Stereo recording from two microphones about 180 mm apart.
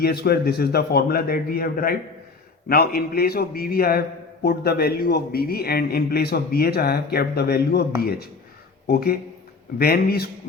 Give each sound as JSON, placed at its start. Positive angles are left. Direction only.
{"t": 0.0, "sound": "a man's voice", "side_deg": 60}
{"t": 8.9, "sound": "a man's voice", "side_deg": 60}